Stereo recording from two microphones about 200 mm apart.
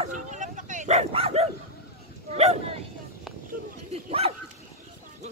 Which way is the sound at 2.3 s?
30° right (ahead or behind).